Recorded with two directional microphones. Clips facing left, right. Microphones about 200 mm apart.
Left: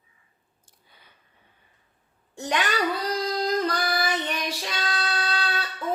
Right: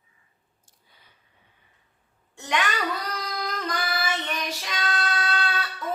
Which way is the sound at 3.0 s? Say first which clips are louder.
Left 7 dB; 30° left (ahead or behind).